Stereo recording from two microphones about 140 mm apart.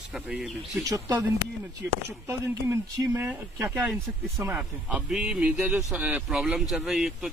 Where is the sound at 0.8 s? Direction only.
25° right (ahead or behind).